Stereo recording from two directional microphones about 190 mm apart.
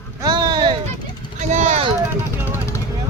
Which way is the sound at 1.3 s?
40° right (ahead or behind).